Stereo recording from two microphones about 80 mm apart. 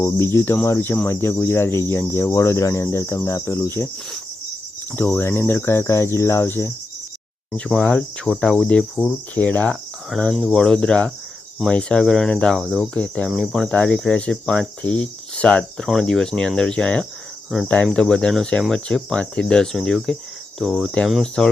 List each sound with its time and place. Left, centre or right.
0.0 s speech: left
4.9 s speech: left
7.8 s speech: centre
10.1 s cricket: centre
10.3 s speech: centre
20.6 s cricket: centre
21.1 s speech: centre